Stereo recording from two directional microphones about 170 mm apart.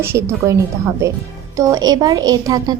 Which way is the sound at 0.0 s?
15° right (ahead or behind).